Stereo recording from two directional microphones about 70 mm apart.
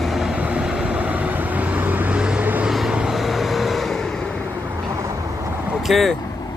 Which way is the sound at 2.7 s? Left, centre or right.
Centre.